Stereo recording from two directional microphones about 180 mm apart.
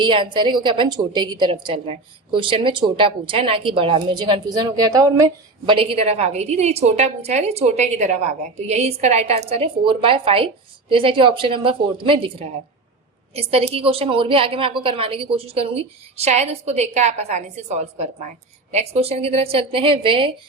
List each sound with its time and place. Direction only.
0.0 s a woman's voice: 25° right (ahead or behind)